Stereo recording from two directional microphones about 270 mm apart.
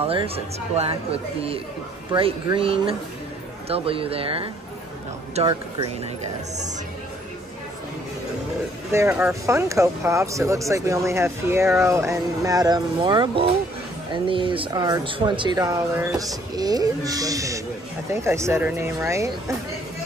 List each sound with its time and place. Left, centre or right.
0.0 s speech: centre
8.9 s speech: centre